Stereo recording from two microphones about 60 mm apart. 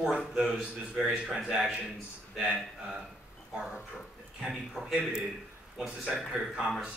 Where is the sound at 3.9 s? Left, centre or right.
Centre.